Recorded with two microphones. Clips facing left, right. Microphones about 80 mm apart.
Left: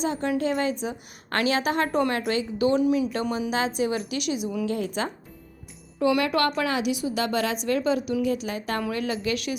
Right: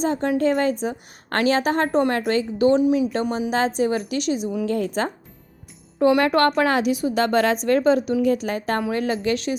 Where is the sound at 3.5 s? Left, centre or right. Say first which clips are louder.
Right 6 dB; right.